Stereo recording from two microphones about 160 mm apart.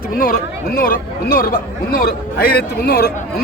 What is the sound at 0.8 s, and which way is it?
A man's voice, 65° left (ahead or behind).